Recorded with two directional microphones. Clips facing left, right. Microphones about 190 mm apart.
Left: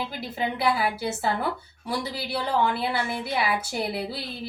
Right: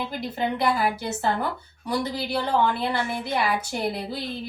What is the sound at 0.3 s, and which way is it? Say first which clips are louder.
Speech: right 1 dB; 5° left (ahead or behind).